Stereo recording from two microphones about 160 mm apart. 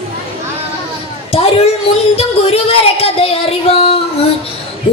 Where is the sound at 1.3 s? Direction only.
40° left (ahead or behind).